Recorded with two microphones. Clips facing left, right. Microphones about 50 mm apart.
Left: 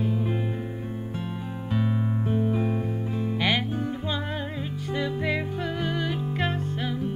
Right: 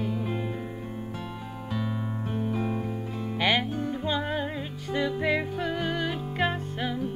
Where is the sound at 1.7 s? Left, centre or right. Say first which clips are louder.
Left 4 dB; left.